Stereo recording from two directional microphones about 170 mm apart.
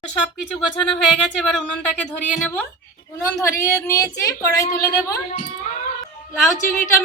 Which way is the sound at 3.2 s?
15° left (ahead or behind).